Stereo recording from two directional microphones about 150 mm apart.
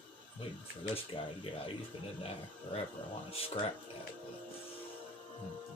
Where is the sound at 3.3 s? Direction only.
40° left (ahead or behind).